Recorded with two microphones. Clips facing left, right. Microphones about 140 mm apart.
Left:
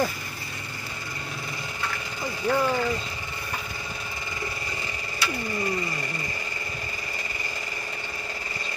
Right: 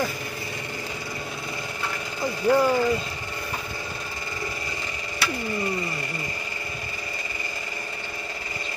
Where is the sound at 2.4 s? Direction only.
10° right (ahead or behind).